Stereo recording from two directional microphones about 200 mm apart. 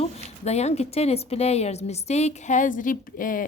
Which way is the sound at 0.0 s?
30° left (ahead or behind).